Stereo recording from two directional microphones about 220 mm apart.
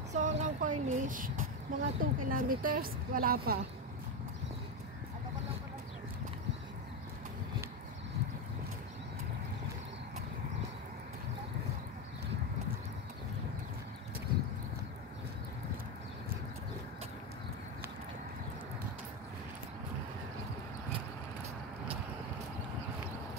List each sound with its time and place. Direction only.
0.1 s speech: 35° right (ahead or behind)